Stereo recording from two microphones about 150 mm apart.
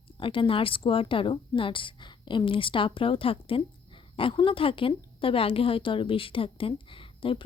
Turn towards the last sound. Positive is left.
turn(degrees=35)  # may be behind; listen again after turning